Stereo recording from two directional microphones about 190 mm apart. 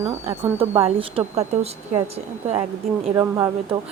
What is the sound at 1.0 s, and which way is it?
A woman's voice, 30° right (ahead or behind).